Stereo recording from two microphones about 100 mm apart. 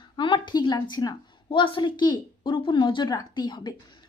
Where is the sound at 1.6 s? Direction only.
55° left (ahead or behind).